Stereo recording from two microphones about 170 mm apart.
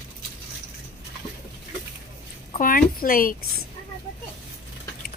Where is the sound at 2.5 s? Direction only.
55° left (ahead or behind).